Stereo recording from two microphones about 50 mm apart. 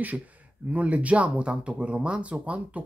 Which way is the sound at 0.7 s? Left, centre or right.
Right.